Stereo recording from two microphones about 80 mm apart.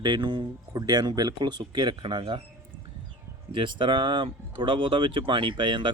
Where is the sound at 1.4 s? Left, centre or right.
Right.